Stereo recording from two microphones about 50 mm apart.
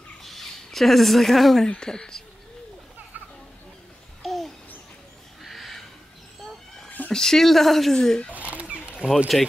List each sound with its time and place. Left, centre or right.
0.2 s speech: centre
1.7 s speech: centre
4.2 s babbling: centre
5.4 s a sound: centre
7.1 s speech: centre
8.3 s rodents: right
9.3 s speech: centre